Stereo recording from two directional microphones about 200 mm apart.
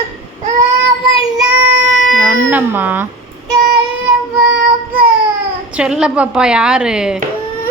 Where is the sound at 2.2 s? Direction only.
10° right (ahead or behind).